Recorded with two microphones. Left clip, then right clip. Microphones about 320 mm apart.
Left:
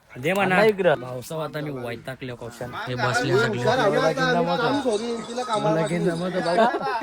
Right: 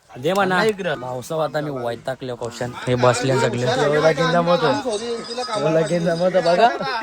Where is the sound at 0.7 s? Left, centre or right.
Centre.